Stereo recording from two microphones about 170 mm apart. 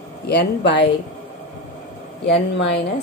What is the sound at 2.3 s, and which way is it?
Speech, 90° left.